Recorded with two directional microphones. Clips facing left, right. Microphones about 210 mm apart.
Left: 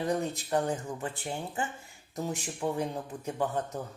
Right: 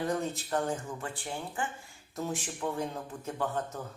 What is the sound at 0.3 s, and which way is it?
A man's voice, 15° left (ahead or behind).